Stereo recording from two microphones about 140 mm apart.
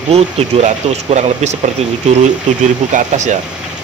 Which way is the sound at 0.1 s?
50° right (ahead or behind).